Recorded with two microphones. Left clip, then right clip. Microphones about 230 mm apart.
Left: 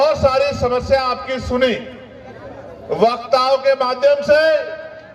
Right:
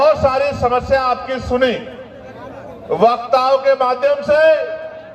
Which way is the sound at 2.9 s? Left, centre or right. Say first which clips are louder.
Right 2 dB; left.